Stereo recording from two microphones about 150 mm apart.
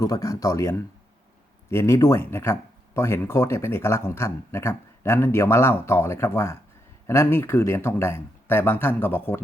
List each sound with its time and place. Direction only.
0.0 s speech: 20° left (ahead or behind)